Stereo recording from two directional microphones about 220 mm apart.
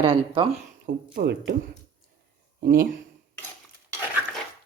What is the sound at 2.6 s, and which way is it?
Speech, 40° right (ahead or behind).